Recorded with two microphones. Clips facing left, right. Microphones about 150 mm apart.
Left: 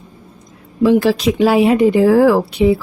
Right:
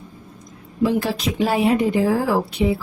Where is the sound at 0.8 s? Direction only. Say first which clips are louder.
Left 8 dB; 90° left.